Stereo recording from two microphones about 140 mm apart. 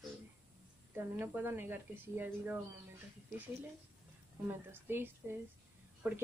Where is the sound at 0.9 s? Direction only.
15° right (ahead or behind).